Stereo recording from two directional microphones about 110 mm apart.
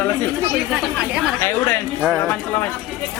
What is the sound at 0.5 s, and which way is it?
Speech, 10° right (ahead or behind).